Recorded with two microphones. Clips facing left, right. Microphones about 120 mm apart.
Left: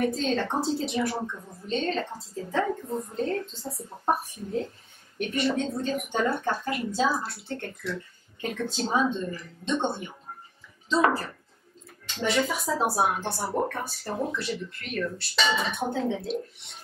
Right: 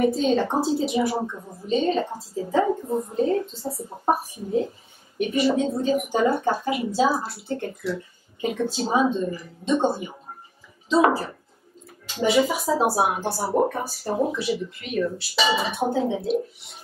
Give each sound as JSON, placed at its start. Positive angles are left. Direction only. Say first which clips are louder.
{"t": 0.0, "sound": "speech", "louder": "right 6 dB", "side_deg": -10}
{"t": 1.2, "sound": "a woman's voice", "louder": "right 4 dB", "side_deg": -30}
{"t": 1.7, "sound": "speech", "louder": "right 6 dB", "side_deg": -5}
{"t": 3.7, "sound": "a woman's voice", "louder": "right 5 dB", "side_deg": -25}
{"t": 4.1, "sound": "speech", "louder": "right 4 dB", "side_deg": -5}
{"t": 12.1, "sound": "speech", "louder": "right 6 dB", "side_deg": -5}